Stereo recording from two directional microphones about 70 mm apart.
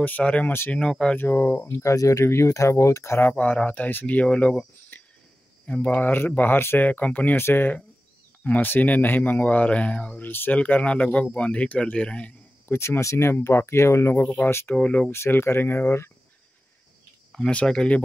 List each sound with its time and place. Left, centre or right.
0.0 s a man's voice: left
1.1 s speech: left
1.8 s speech: left
3.3 s a man's voice: left
4.9 s cricket: left
5.7 s a man's voice: centre
6.9 s a man's voice: left
12.6 s speech: left
14.2 s a man's voice: left
15.0 s speech: left
17.3 s speech: centre